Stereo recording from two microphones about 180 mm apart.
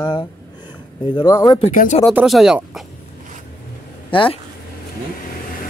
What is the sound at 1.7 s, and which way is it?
Speech, 50° left (ahead or behind).